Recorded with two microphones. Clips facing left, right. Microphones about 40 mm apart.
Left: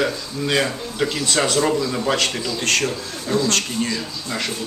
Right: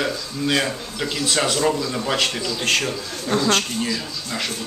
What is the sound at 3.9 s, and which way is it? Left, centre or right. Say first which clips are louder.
Speech: left 1 dB; centre.